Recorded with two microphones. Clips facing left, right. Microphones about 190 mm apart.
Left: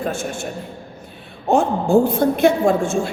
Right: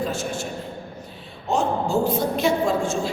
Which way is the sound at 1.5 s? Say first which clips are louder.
Left 6 dB; 55° left (ahead or behind).